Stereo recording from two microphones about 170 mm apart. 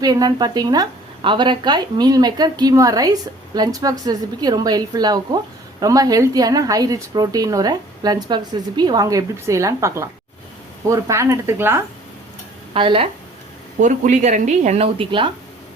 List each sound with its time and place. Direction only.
0.0 s a woman's voice: 20° right (ahead or behind)
12.7 s speech: 30° right (ahead or behind)
13.7 s a woman's voice: 50° right (ahead or behind); by 15.3 s 30° right (ahead or behind)